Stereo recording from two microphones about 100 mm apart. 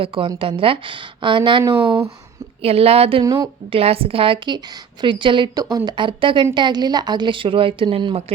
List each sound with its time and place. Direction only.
0.0 s a woman's voice: 65° right (ahead or behind)
2.6 s a woman's voice: 80° right
3.2 s a woman's voice: 35° right (ahead or behind)
3.7 s a woman's voice: 75° right (ahead or behind); by 5.5 s 55° right (ahead or behind)
5.7 s a woman's voice: 40° right (ahead or behind)
6.1 s a woman's voice: 60° right (ahead or behind)